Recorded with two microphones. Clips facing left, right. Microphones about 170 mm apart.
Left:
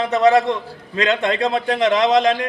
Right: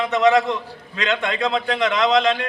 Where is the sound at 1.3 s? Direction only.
25° left (ahead or behind).